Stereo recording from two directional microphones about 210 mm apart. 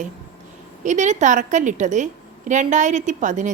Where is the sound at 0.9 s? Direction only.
35° right (ahead or behind).